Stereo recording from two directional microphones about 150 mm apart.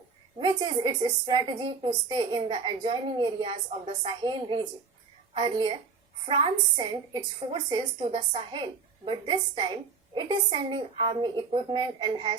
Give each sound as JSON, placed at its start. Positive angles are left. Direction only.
{"t": 0.3, "sound": "a woman's voice", "side_deg": -30}